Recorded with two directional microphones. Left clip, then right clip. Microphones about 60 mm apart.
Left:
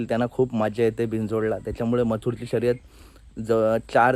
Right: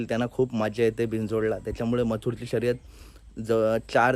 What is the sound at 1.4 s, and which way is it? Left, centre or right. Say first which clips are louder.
A man's voice: left 1 dB; right.